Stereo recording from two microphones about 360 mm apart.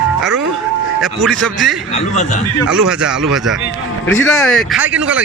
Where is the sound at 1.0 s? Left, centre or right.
Centre.